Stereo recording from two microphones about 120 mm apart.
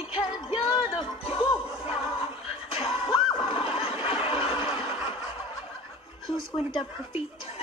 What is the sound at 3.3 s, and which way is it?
Neigh, 40° left (ahead or behind).